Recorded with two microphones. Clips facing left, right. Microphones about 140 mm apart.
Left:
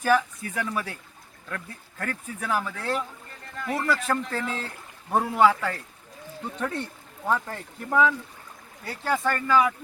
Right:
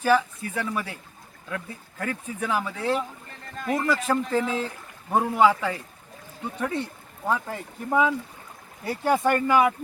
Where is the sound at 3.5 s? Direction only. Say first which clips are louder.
Right 2 dB; 20° right (ahead or behind).